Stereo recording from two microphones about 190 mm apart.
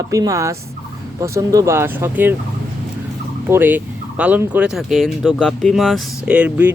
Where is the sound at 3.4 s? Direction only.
10° right (ahead or behind).